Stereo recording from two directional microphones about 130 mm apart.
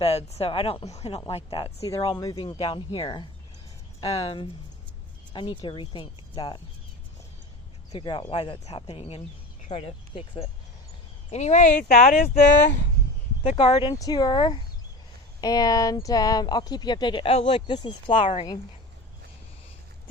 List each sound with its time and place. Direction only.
0.0 s speech: 50° left (ahead or behind)
1.9 s speech: 30° left (ahead or behind)
7.9 s speech: 35° left (ahead or behind)
8.9 s speech: 45° left (ahead or behind)
11.3 s speech: 60° left (ahead or behind); by 12.5 s 75° left (ahead or behind)
13.6 s speech: 40° left (ahead or behind)